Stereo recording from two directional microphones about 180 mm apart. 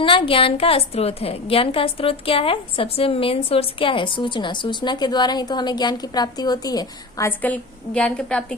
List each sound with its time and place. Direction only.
0.0 s a woman's voice: 30° left (ahead or behind); by 8.5 s 5° left (ahead or behind)